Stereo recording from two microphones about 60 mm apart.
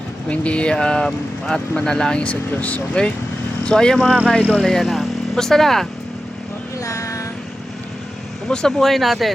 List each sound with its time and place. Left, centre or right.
0.3 s speech: centre
3.7 s speech: centre
6.8 s a sound: left
8.4 s speech: centre